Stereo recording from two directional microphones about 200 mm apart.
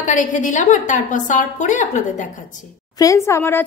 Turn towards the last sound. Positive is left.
turn(degrees=10)  # may be behind; listen again after turning